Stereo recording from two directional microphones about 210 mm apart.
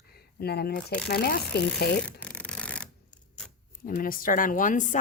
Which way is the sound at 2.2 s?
5° left (ahead or behind).